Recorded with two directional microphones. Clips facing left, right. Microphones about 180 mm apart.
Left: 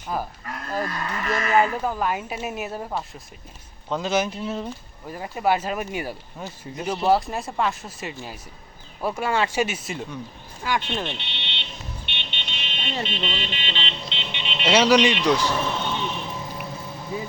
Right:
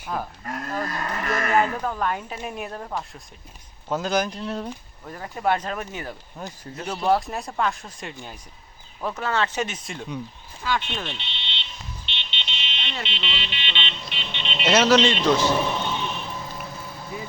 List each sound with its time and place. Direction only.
1.0 s speech: 45° right (ahead or behind)
1.6 s a woman's voice: 10° left (ahead or behind)
10.6 s speech: 20° left (ahead or behind)
11.1 s speech: 60° left (ahead or behind)
12.0 s vehicle: 55° left (ahead or behind); by 13.9 s 40° left (ahead or behind)
14.1 s vehicle: 20° left (ahead or behind)
14.4 s a man's voice: 10° left (ahead or behind)
15.4 s speech: 15° right (ahead or behind)
15.8 s a sound: centre (ahead or behind)